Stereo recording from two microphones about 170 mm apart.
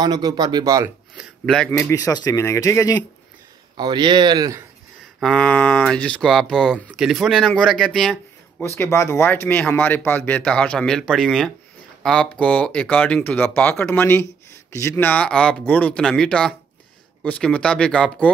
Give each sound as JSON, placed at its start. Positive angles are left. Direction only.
{"t": 0.0, "sound": "speech", "side_deg": -25}
{"t": 1.1, "sound": "a sound", "side_deg": 0}
{"t": 1.7, "sound": "speech", "side_deg": 15}
{"t": 3.7, "sound": "speech", "side_deg": -25}
{"t": 5.2, "sound": "speech", "side_deg": 5}
{"t": 8.6, "sound": "speech", "side_deg": 15}